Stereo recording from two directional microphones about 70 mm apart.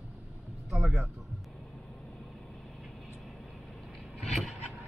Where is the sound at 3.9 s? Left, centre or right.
Centre.